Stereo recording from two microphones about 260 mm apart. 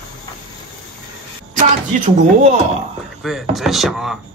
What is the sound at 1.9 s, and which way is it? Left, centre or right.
Speech, right.